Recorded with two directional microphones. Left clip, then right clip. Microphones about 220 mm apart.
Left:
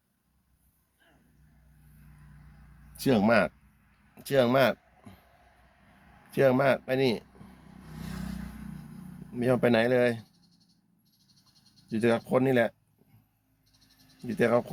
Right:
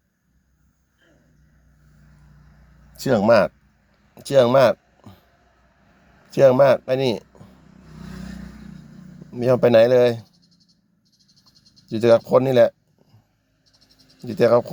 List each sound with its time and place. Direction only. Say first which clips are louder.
2.9 s speech: right 8 dB; 30° right (ahead or behind)
4.1 s a sound: right 9 dB; 35° right (ahead or behind)
6.3 s speech: right 10 dB; 35° right (ahead or behind)
9.3 s speech: right 10 dB; 35° right (ahead or behind)
11.9 s speech: right 11 dB; 35° right (ahead or behind)
14.3 s speech: right 9 dB; 35° right (ahead or behind)